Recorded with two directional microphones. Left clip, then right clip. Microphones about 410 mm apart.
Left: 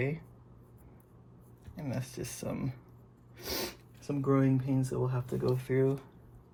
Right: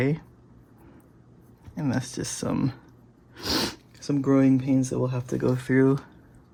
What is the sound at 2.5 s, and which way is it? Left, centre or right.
Speech, right.